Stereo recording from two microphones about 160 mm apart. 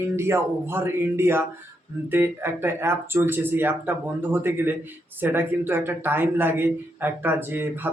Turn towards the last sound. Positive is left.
turn(degrees=-10)  # may be behind; listen again after turning